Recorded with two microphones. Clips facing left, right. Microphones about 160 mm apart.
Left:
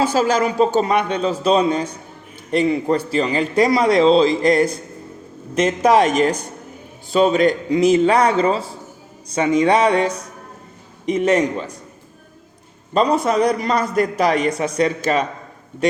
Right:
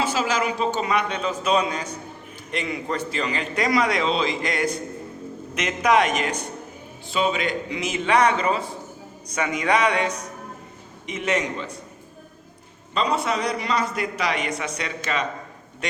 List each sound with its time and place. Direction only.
0.1 s a man's voice: 40° left (ahead or behind)
12.9 s a man's voice: 45° left (ahead or behind)